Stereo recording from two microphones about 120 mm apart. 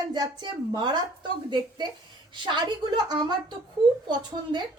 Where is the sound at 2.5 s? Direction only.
40° right (ahead or behind).